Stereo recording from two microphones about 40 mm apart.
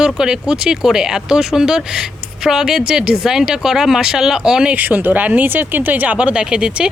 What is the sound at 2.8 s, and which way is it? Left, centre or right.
Speech, right.